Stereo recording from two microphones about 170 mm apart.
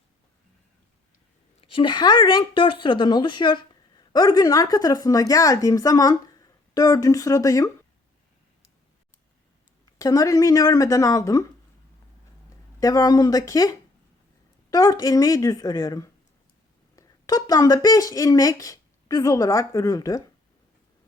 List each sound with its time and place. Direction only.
1.7 s speech: 30° left (ahead or behind)
10.0 s speech: 20° left (ahead or behind)
12.8 s speech: 20° left (ahead or behind)